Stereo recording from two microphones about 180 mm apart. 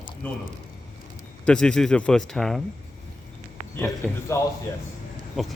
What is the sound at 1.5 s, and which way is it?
Speech, 5° left (ahead or behind).